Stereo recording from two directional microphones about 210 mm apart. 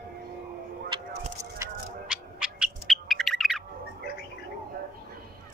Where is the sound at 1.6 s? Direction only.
5° right (ahead or behind).